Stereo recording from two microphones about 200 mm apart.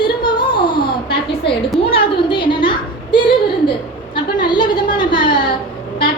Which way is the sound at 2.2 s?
25° left (ahead or behind).